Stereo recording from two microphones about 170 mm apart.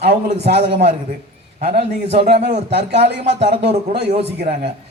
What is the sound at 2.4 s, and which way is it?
Speech, 45° right (ahead or behind).